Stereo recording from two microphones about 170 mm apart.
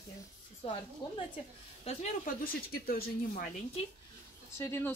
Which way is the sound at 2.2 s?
60° left (ahead or behind).